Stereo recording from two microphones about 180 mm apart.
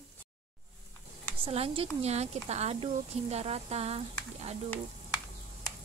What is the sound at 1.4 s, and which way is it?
Speech, 30° right (ahead or behind).